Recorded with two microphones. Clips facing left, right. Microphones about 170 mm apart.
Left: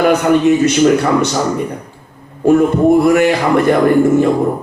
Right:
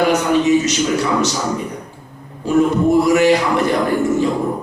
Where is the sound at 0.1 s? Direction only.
55° left (ahead or behind).